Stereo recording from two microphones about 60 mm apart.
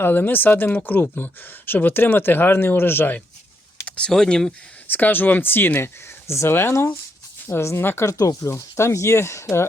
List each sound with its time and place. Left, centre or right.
0.0 s speech: left
3.8 s typing: centre
4.1 s speech: centre
4.9 s speech: left
5.8 s speech: left
7.8 s speech: left
8.0 s speech: left
8.4 s speech: left